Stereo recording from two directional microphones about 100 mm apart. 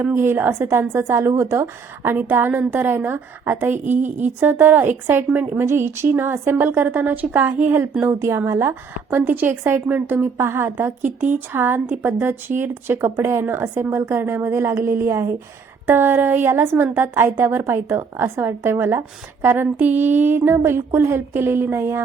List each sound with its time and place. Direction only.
0.0 s a woman's voice: 20° right (ahead or behind)